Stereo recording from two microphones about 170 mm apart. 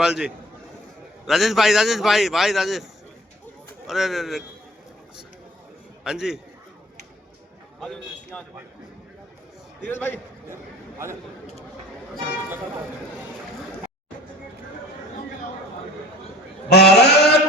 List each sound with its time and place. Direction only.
0.0 s a man's voice: 5° right (ahead or behind)
3.8 s a man's voice: centre (ahead or behind)
6.1 s a man's voice: 5° right (ahead or behind)
7.8 s a man's voice: 5° left (ahead or behind)
9.8 s a man's voice: 10° left (ahead or behind)
10.5 s a sound: 15° right (ahead or behind)
16.6 s a sound: 75° left (ahead or behind)